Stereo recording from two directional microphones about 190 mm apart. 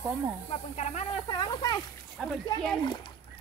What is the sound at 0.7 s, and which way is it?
Speech, 35° left (ahead or behind).